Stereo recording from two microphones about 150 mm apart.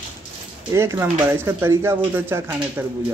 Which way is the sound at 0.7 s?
15° right (ahead or behind).